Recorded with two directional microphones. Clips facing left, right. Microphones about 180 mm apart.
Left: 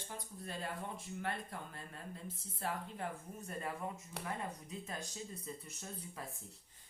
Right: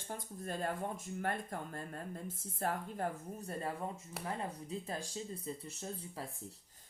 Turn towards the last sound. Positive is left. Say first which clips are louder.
# right 4 dB
turn(degrees=-30)  # may be behind; listen again after turning